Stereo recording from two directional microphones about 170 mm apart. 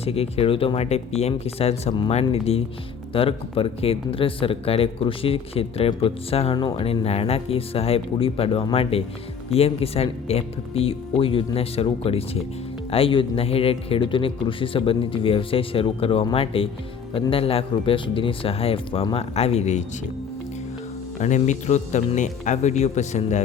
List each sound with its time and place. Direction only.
0.0 s speech: 35° left (ahead or behind)
21.2 s speech: 45° left (ahead or behind)